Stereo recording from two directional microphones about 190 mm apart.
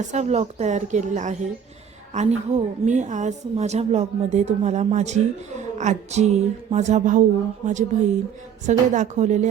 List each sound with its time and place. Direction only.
0.0 s a woman's voice: 40° right (ahead or behind)